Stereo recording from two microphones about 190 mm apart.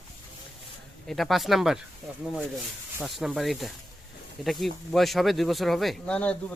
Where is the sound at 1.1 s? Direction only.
Centre (ahead or behind).